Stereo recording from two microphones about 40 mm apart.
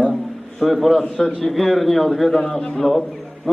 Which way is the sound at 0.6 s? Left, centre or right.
Centre.